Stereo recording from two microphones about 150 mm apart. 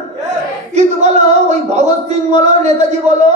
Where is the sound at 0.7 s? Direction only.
50° right (ahead or behind).